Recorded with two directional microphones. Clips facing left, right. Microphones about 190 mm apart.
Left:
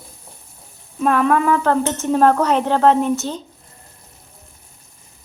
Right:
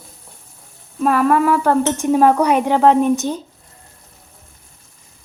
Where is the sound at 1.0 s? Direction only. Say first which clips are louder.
Right 1 dB; 5° right (ahead or behind).